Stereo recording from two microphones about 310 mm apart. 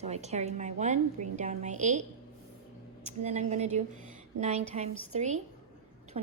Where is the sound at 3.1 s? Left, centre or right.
Right.